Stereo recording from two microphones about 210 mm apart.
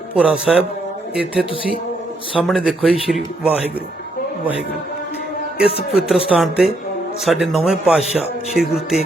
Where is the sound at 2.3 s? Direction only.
5° right (ahead or behind).